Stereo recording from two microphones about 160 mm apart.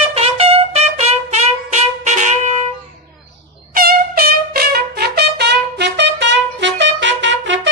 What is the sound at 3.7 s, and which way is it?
Trumpet, 70° right (ahead or behind).